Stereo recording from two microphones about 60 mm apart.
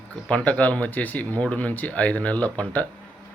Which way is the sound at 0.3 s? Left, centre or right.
Left.